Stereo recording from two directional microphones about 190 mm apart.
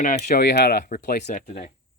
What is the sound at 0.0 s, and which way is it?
Speech, 45° left (ahead or behind).